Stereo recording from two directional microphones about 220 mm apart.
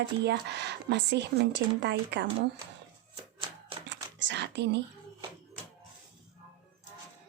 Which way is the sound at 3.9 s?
55° right (ahead or behind).